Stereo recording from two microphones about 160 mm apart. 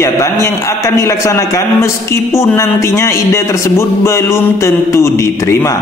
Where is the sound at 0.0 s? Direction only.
15° left (ahead or behind).